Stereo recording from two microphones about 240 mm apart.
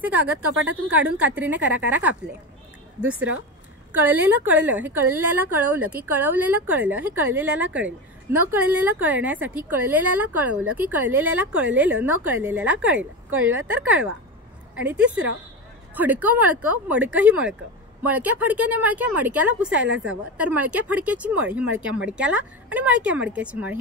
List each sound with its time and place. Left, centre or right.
0.0 s a woman's voice: centre
15.9 s a woman's voice: centre
19.8 s a woman's voice: right
20.1 s speech: centre